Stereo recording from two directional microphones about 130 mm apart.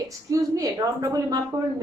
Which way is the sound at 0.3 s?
25° right (ahead or behind).